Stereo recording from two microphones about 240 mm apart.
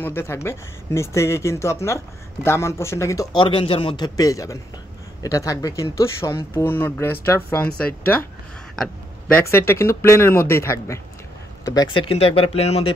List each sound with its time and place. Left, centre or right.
0.0 s speech: centre; by 12.9 s left